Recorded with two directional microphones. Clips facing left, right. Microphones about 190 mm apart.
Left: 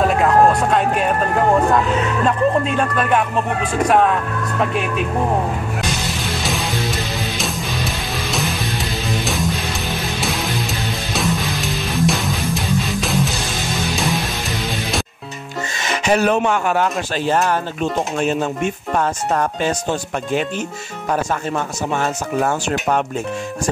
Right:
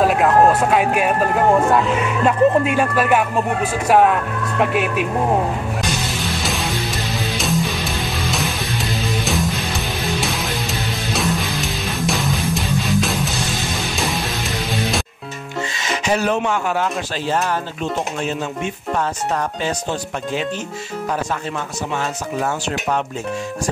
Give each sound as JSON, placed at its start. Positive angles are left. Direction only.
{"t": 0.0, "sound": "vehicle", "side_deg": -5}
{"t": 2.0, "sound": "speech", "side_deg": -10}
{"t": 7.3, "sound": "music", "side_deg": 0}
{"t": 15.8, "sound": "speech", "side_deg": 55}
{"t": 21.1, "sound": "speech", "side_deg": 50}